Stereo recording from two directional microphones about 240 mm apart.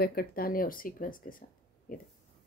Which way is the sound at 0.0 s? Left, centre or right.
Left.